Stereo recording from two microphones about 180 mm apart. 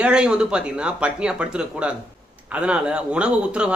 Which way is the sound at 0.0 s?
5° right (ahead or behind).